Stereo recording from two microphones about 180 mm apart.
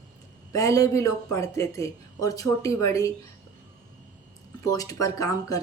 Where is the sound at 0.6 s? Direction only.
20° left (ahead or behind).